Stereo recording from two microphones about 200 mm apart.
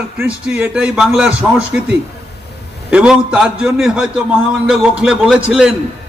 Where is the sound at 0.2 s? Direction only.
5° right (ahead or behind).